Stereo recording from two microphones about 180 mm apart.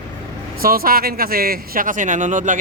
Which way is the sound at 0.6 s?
55° right (ahead or behind).